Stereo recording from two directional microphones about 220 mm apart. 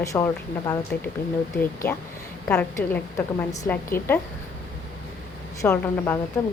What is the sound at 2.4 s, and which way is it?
A woman's voice, 10° left (ahead or behind).